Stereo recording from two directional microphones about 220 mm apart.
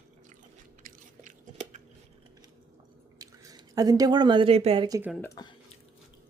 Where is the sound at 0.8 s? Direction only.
35° right (ahead or behind).